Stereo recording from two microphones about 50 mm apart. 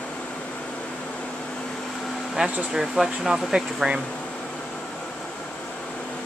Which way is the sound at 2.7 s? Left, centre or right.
Centre.